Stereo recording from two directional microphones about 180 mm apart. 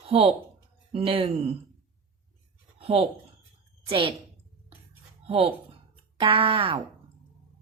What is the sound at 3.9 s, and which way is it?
Speech, 30° right (ahead or behind).